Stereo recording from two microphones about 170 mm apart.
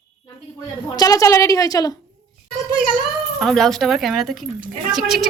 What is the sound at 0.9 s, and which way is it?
A woman's voice, 20° left (ahead or behind).